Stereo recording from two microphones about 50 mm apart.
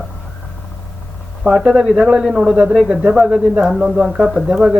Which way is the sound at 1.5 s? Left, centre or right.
Centre.